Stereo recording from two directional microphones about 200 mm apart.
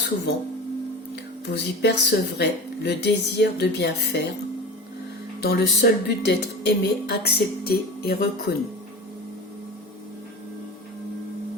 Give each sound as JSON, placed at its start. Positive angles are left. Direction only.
{"t": 1.1, "sound": "speech", "side_deg": 55}
{"t": 5.4, "sound": "speech", "side_deg": 55}